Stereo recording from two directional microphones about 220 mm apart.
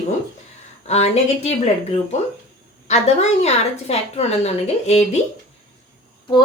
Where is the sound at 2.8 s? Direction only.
30° left (ahead or behind).